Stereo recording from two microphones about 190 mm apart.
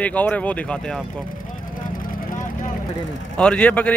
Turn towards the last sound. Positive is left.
turn(degrees=5)  # may be behind; listen again after turning